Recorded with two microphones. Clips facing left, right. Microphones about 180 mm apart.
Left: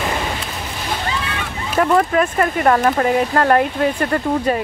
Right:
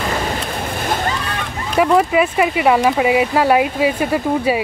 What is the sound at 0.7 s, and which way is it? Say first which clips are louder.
Water: right 2 dB; 50° right (ahead or behind).